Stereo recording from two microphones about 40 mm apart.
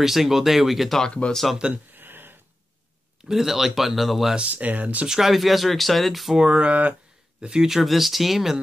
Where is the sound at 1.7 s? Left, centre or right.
Right.